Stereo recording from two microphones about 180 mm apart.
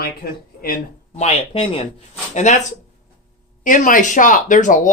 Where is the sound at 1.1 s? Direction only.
35° left (ahead or behind).